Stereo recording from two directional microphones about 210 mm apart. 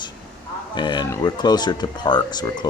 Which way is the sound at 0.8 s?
20° left (ahead or behind).